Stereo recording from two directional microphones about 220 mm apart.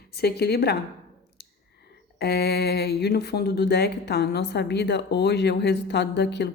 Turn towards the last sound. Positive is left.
turn(degrees=50)  # may be behind; listen again after turning